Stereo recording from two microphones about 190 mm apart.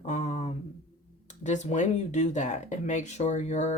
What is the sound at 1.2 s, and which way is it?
Speech, 40° left (ahead or behind).